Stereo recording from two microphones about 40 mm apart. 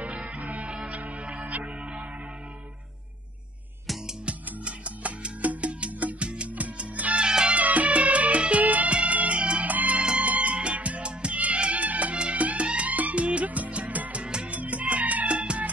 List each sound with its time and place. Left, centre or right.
0.0 s music: right
0.4 s music: right
0.7 s music: right
4.6 s music: right
7.2 s music: right
7.5 s music: right
9.7 s music: right
14.2 s music: right